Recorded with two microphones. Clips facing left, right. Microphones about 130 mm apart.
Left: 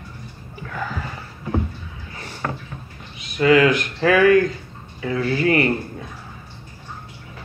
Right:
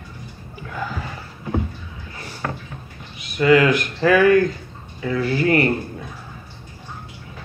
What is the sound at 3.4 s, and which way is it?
Speech, 35° right (ahead or behind).